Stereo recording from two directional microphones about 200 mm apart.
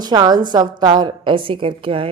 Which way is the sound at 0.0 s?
20° right (ahead or behind).